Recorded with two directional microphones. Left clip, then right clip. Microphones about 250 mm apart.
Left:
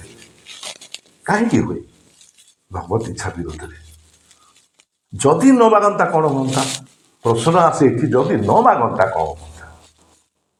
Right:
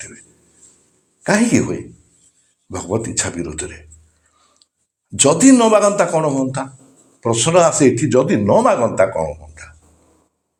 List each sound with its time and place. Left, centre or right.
1.2 s speech: right
2.7 s speech: right
5.1 s speech: right